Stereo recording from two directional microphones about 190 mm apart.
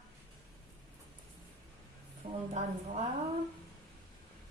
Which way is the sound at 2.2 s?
35° right (ahead or behind).